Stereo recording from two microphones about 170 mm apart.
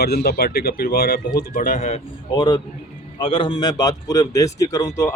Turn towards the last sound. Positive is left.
turn(degrees=15)  # may be behind; listen again after turning